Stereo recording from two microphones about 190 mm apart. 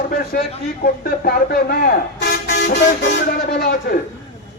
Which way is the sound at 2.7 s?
65° left (ahead or behind).